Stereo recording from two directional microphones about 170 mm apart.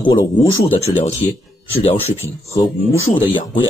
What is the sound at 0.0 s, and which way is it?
Speech, 30° left (ahead or behind).